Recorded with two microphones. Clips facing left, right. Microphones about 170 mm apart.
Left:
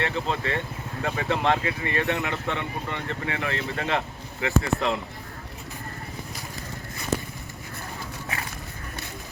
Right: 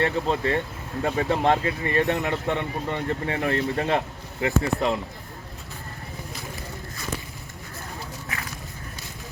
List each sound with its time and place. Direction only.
0.0 s speech: 40° right (ahead or behind)